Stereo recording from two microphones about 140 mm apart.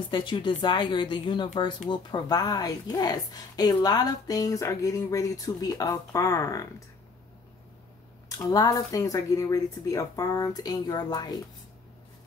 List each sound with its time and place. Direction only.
0.1 s a woman's voice: 35° left (ahead or behind)
8.5 s a woman's voice: 25° left (ahead or behind)